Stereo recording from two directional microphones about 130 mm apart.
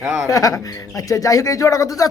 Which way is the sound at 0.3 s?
25° left (ahead or behind).